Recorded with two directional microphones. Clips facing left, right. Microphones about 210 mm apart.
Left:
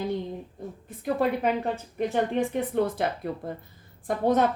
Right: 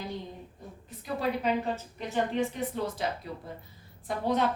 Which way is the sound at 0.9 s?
55° left (ahead or behind).